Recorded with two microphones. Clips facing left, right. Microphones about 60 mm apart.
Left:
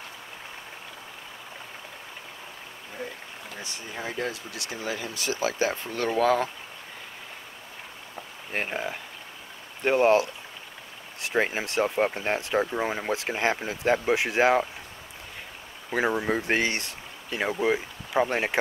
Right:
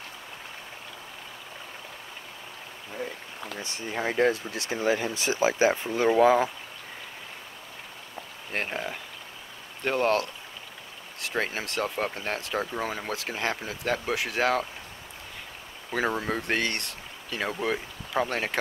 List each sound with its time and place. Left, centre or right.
3.6 s speech: right; by 6.5 s centre
8.5 s speech: centre
15.9 s speech: centre